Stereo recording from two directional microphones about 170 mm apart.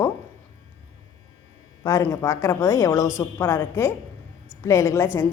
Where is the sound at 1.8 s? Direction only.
20° left (ahead or behind).